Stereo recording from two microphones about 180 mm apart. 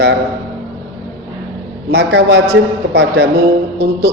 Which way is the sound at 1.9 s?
65° right (ahead or behind).